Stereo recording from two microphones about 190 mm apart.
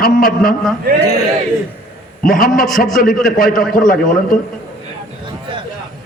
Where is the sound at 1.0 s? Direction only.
35° left (ahead or behind).